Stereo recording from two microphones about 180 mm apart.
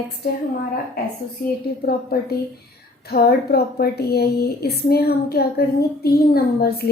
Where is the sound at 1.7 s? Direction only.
55° left (ahead or behind).